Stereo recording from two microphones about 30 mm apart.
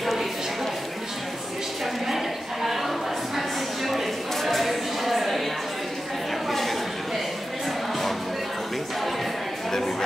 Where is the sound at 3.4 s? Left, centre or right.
Centre.